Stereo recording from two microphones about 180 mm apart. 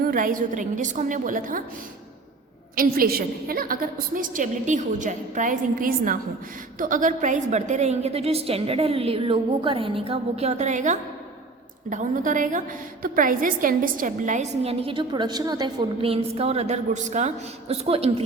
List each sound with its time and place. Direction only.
0.0 s a woman's voice: 50° right (ahead or behind)
2.7 s a woman's voice: 55° right (ahead or behind); by 18.2 s 35° right (ahead or behind)